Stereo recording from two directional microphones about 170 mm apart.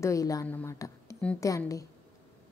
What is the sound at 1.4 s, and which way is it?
Speech, 20° left (ahead or behind).